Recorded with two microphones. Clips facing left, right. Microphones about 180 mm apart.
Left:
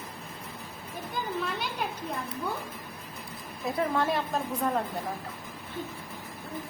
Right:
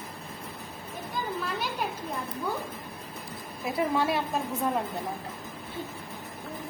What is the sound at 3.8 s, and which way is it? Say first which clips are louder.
Speech: right 1 dB; 5° right (ahead or behind).